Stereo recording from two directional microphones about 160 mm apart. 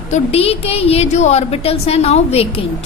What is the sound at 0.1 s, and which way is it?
A woman's voice, 40° left (ahead or behind).